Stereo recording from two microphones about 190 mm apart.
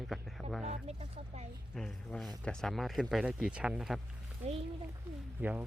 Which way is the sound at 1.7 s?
Centre (ahead or behind).